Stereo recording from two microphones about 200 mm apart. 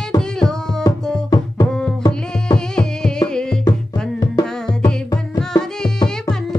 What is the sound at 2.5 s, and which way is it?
Music, 5° left (ahead or behind).